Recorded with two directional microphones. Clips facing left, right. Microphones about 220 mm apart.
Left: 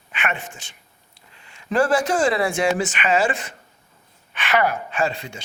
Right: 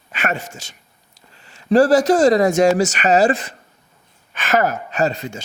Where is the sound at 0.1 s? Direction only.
40° right (ahead or behind).